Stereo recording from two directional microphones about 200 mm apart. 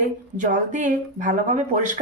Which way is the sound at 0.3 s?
40° right (ahead or behind).